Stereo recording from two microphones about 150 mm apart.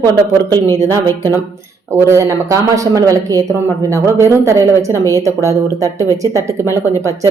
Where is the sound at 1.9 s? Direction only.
20° right (ahead or behind).